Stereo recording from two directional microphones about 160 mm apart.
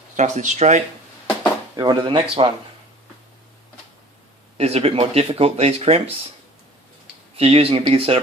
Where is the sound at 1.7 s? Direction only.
25° right (ahead or behind).